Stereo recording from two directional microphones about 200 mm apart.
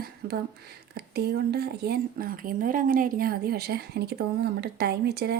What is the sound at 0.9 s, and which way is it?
A woman's voice, 55° right (ahead or behind).